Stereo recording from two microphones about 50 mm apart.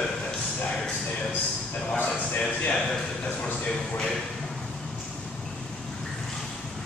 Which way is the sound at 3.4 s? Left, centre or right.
Left.